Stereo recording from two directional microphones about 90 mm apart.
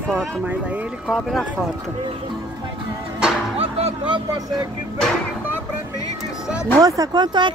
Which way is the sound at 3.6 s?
65° right (ahead or behind).